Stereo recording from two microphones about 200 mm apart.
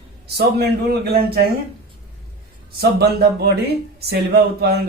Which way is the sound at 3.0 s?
55° right (ahead or behind).